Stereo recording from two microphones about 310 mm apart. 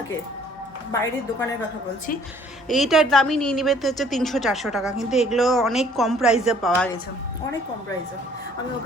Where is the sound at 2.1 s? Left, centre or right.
Left.